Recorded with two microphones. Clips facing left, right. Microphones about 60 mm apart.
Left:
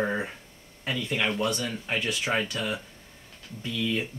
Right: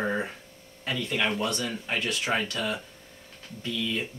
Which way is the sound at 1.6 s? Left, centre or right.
Centre.